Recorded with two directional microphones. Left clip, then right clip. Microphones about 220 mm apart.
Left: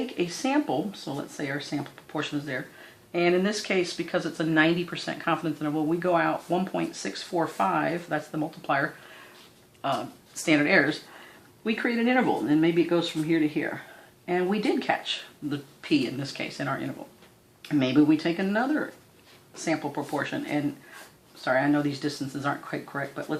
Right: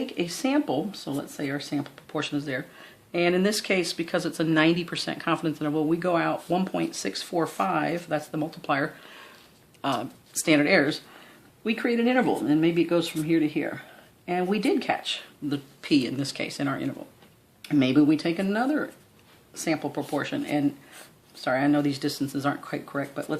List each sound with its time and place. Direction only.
0.0 s speech: 40° right (ahead or behind)
9.8 s speech: 50° right (ahead or behind)